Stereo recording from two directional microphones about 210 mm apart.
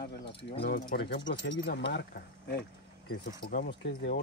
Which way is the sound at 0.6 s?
50° left (ahead or behind).